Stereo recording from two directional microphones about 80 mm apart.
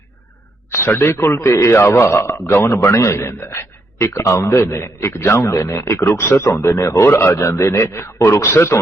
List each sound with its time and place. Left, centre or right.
0.7 s a man's voice: left